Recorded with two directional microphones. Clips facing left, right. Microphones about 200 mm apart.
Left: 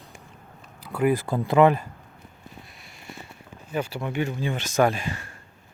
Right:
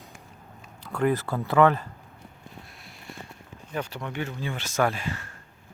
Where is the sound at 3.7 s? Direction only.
5° left (ahead or behind).